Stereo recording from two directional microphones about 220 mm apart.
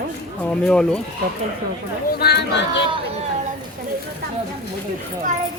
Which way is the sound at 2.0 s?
45° left (ahead or behind).